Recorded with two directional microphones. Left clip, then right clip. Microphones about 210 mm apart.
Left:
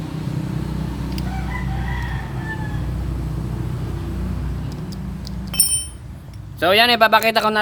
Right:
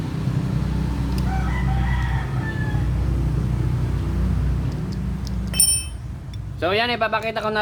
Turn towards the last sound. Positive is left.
turn(degrees=50)  # may be behind; listen again after turning